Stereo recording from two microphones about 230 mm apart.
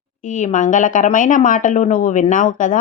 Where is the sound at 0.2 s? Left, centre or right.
Left.